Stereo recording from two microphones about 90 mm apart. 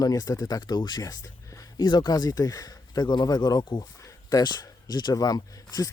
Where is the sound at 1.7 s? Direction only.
55° left (ahead or behind).